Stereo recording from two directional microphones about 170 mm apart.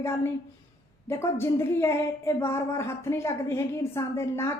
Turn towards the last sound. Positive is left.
turn(degrees=15)  # may be behind; listen again after turning